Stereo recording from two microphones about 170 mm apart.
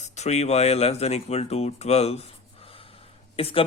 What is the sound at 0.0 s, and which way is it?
Speech, 40° left (ahead or behind).